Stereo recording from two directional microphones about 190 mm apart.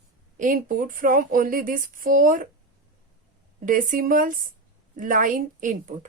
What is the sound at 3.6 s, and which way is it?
Speech, 45° right (ahead or behind).